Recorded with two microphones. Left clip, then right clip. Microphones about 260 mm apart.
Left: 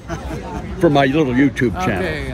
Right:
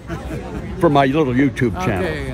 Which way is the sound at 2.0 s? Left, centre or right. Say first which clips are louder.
Even; centre.